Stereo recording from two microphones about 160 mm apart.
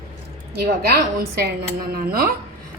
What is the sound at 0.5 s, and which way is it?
Speech, 75° right (ahead or behind).